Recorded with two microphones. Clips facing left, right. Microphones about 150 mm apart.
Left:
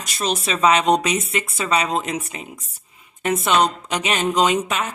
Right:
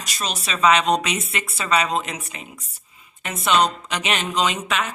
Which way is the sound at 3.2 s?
45° left (ahead or behind).